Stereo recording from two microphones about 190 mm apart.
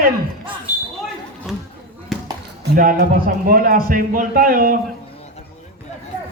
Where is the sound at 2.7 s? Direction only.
50° right (ahead or behind).